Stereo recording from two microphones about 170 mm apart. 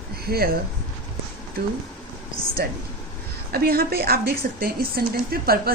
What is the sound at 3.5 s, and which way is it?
A woman's voice, 65° right (ahead or behind).